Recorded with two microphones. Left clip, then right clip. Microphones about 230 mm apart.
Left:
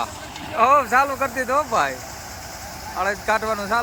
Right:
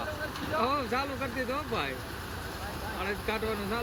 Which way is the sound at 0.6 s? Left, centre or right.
Centre.